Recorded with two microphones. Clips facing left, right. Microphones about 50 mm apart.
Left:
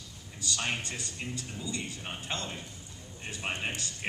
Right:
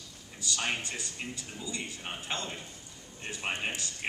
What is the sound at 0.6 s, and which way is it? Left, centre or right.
A man's voice, centre.